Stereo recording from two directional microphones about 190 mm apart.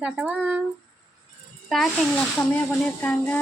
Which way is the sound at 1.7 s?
Centre (ahead or behind).